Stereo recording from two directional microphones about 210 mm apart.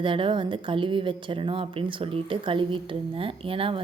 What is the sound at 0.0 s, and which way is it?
Speech, 25° right (ahead or behind).